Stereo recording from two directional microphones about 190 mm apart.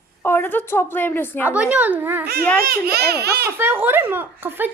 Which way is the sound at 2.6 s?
55° right (ahead or behind).